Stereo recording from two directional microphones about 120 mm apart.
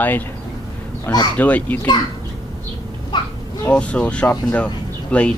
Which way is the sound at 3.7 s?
10° left (ahead or behind).